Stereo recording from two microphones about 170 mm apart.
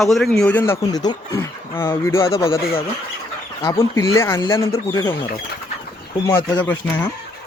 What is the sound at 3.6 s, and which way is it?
Speech, 20° left (ahead or behind).